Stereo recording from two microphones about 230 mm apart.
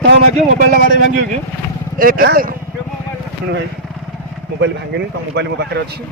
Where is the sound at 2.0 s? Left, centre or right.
Right.